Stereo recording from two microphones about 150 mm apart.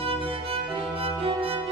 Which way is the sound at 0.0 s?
40° right (ahead or behind).